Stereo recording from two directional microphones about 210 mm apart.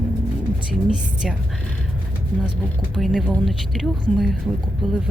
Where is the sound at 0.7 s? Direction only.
5° right (ahead or behind).